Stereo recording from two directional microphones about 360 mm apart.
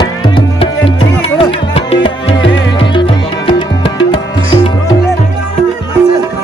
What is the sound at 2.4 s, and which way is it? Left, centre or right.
Music, left.